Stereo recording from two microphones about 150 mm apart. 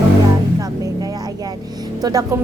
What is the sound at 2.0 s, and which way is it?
Speech, 25° right (ahead or behind).